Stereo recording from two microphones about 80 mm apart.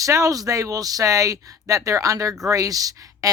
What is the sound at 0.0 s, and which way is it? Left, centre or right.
Speech, right.